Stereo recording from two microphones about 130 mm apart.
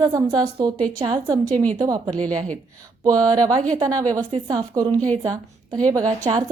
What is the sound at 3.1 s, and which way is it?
A woman's voice, 30° right (ahead or behind).